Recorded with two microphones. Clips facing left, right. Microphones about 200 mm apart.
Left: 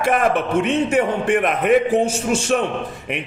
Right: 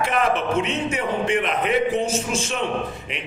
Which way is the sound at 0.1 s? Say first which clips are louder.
Left 6 dB; 55° left (ahead or behind).